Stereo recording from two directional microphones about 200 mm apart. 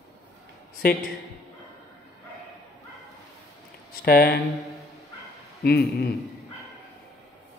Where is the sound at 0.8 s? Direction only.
50° left (ahead or behind).